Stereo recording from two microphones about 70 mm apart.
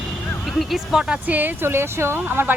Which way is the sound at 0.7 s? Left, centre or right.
Centre.